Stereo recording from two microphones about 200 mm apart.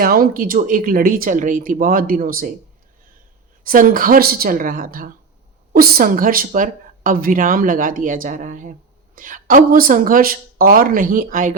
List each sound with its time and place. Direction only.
0.0 s speech: 45° right (ahead or behind)
3.6 s speech: 45° right (ahead or behind)